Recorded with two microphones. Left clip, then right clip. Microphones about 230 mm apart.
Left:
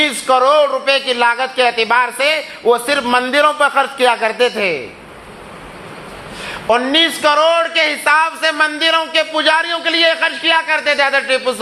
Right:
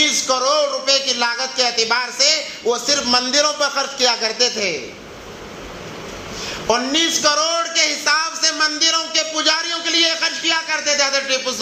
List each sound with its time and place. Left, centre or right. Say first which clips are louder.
0.0 s a man's voice: left 5 dB; left
6.4 s a man's voice: left 4 dB; left